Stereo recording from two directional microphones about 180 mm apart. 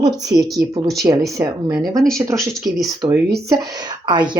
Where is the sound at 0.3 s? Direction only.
20° right (ahead or behind).